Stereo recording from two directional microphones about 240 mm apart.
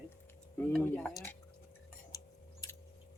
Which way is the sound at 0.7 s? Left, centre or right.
Centre.